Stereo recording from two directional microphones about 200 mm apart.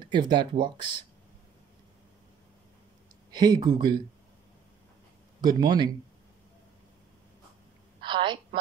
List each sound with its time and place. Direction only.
0.1 s speech: 20° right (ahead or behind)
3.3 s speech: 20° right (ahead or behind)
5.4 s speech: 20° right (ahead or behind)
8.0 s telephone: 25° right (ahead or behind)